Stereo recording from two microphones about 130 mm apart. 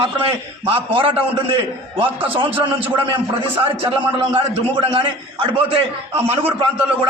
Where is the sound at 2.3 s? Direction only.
40° right (ahead or behind).